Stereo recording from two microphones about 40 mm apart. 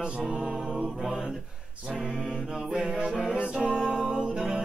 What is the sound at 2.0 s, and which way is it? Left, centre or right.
Mantra, right.